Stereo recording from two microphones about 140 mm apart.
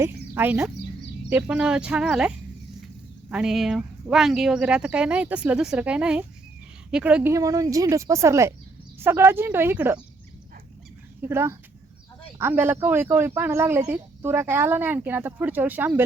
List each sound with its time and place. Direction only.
0.0 s speech: 15° right (ahead or behind)
11.2 s speech: 15° right (ahead or behind)